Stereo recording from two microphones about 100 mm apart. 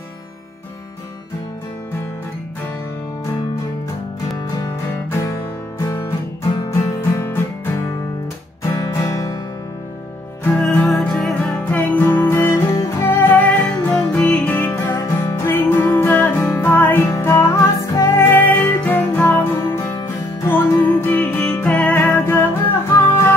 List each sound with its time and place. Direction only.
6.7 s music: 25° left (ahead or behind)
10.8 s music: 10° left (ahead or behind)
11.7 s music: 20° left (ahead or behind)